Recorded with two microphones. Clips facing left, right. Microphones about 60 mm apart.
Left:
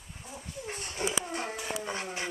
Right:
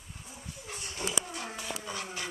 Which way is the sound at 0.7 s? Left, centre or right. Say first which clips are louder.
Left 3 dB; left.